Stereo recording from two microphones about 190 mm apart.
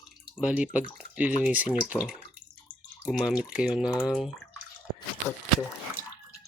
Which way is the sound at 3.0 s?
5° right (ahead or behind).